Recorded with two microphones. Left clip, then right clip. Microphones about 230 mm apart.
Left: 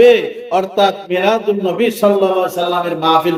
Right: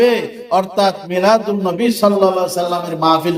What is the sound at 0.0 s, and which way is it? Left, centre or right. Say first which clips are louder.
A man's voice: left 5 dB; right.